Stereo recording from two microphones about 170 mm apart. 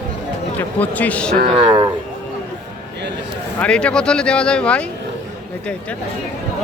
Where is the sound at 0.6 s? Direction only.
10° left (ahead or behind).